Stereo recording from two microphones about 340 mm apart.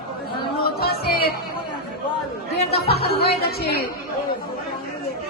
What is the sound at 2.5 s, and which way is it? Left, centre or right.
Speech, left.